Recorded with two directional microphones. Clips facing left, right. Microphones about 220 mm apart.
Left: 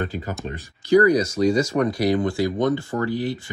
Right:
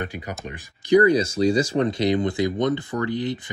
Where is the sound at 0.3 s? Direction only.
15° right (ahead or behind).